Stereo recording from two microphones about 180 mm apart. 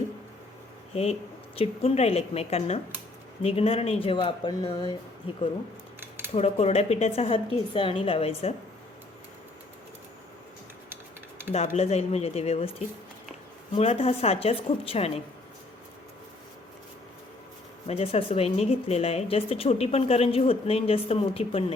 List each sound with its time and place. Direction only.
0.9 s speech: 30° left (ahead or behind)
6.0 s cutlery: 10° right (ahead or behind)
6.3 s speech: 35° left (ahead or behind)
11.5 s speech: 35° left (ahead or behind)
13.7 s speech: 35° left (ahead or behind)
17.8 s speech: 35° left (ahead or behind)